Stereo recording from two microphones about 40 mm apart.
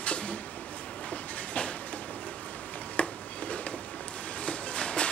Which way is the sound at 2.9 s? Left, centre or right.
Left.